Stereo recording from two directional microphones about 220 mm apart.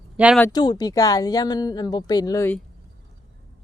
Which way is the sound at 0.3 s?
15° left (ahead or behind).